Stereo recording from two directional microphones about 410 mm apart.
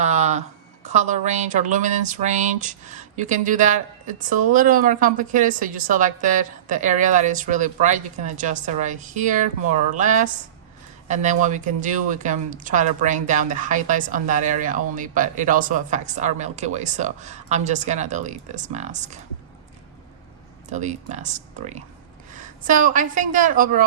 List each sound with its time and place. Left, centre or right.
0.0 s a woman's voice: centre
20.7 s a woman's voice: centre